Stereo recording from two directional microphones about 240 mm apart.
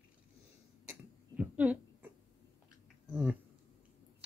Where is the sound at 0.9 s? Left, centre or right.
Centre.